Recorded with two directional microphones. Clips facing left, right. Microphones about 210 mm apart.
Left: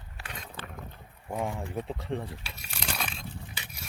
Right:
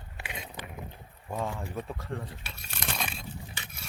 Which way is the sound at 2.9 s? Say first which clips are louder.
Even; centre (ahead or behind).